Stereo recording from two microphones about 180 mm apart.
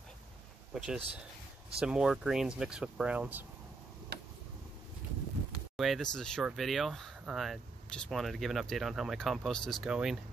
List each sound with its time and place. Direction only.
0.7 s speech: 5° right (ahead or behind)
4.1 s a sound: 65° right (ahead or behind)
5.8 s speech: centre (ahead or behind)